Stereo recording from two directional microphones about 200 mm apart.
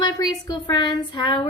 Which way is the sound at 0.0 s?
20° left (ahead or behind).